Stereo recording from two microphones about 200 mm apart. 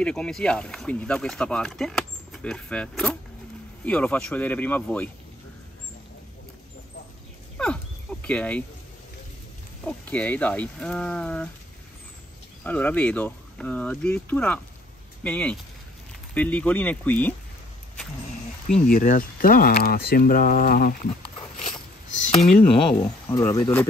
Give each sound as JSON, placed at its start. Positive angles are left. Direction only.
{"t": 0.0, "sound": "speech", "side_deg": 5}
{"t": 7.5, "sound": "a sound", "side_deg": 5}
{"t": 9.8, "sound": "speech", "side_deg": 5}
{"t": 12.6, "sound": "speech", "side_deg": 5}
{"t": 18.9, "sound": "speech", "side_deg": 45}
{"t": 22.3, "sound": "speech", "side_deg": 30}
{"t": 23.6, "sound": "speech", "side_deg": 5}